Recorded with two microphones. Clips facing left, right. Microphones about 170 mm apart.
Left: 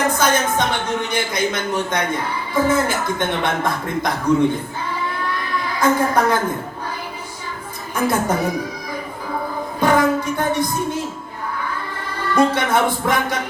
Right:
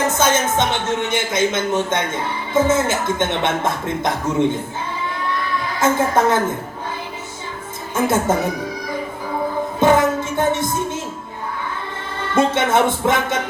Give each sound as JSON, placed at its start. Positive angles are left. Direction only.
{"t": 0.1, "sound": "speech", "side_deg": -25}
{"t": 5.8, "sound": "speech", "side_deg": -25}
{"t": 7.9, "sound": "speech", "side_deg": -25}
{"t": 9.8, "sound": "music", "side_deg": -25}
{"t": 12.3, "sound": "speech", "side_deg": -25}